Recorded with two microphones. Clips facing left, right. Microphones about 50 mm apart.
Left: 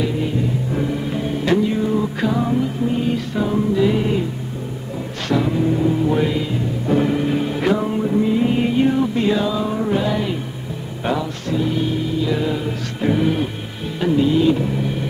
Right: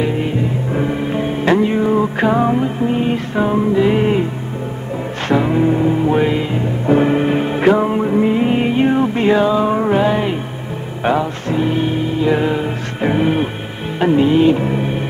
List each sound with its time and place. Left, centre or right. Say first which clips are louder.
0.7 s music: right 6 dB; right
5.3 s music: right 4 dB; right